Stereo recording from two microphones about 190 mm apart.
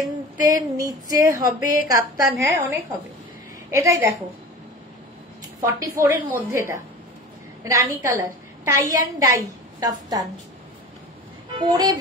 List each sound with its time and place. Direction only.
0.4 s a woman's voice: 20° right (ahead or behind)
5.6 s a woman's voice: 15° right (ahead or behind)
11.5 s speech: 25° right (ahead or behind)